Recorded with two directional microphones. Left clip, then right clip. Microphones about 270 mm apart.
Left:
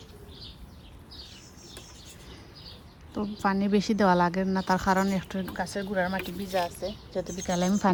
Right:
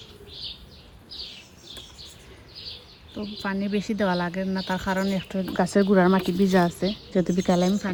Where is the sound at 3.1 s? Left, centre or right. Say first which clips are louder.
Left 3 dB; centre.